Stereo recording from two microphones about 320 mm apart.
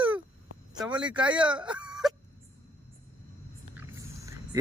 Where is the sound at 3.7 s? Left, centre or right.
Centre.